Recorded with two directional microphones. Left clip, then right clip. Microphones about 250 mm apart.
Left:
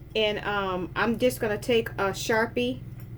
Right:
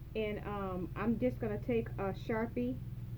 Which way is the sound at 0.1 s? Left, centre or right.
Centre.